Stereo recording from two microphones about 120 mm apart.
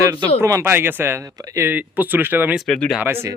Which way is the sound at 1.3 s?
30° right (ahead or behind).